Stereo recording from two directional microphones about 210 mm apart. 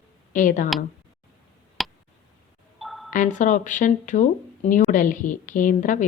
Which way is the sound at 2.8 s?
Centre (ahead or behind).